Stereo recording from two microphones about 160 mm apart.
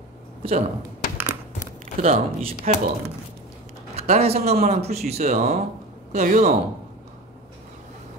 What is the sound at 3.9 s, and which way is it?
Speech, 40° right (ahead or behind).